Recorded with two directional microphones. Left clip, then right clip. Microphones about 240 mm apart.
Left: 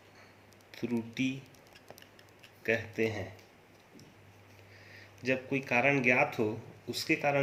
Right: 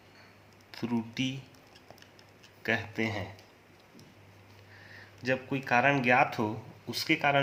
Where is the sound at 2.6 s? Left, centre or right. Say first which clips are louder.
Even; right.